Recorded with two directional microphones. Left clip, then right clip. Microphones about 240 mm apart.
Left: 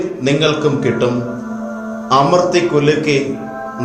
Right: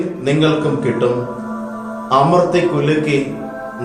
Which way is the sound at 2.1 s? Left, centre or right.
Left.